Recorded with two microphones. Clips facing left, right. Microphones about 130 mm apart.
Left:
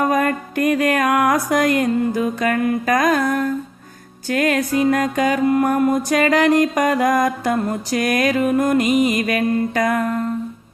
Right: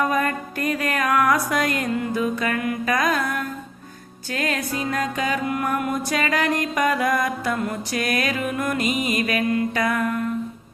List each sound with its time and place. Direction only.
0.0 s music: 40° left (ahead or behind)